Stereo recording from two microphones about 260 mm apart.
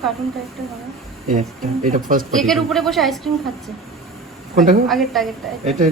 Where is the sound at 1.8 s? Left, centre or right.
Right.